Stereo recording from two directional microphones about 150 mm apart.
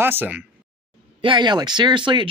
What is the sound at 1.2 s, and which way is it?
Speech, 30° right (ahead or behind).